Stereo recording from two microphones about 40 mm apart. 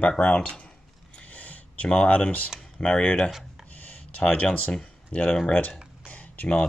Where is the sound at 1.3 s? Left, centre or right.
Left.